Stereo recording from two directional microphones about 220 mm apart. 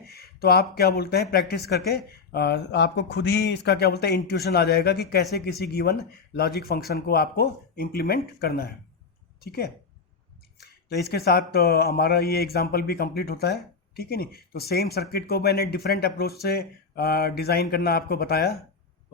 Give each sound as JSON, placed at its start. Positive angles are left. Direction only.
{"t": 0.1, "sound": "speech", "side_deg": 45}
{"t": 11.1, "sound": "speech", "side_deg": 45}